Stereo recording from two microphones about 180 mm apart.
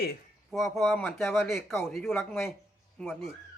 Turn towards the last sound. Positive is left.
turn(degrees=5)  # may be behind; listen again after turning